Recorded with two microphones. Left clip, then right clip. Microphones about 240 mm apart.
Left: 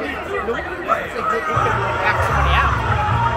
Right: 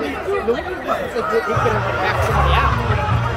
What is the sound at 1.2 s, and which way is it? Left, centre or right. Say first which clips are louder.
Speech: right 1 dB; right.